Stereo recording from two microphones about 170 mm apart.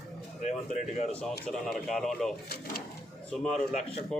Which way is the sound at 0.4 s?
45° left (ahead or behind).